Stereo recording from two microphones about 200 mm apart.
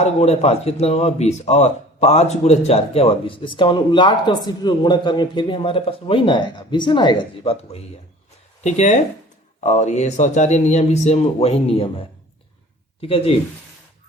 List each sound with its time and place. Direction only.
0.0 s speech: 30° left (ahead or behind)
13.0 s speech: 30° left (ahead or behind)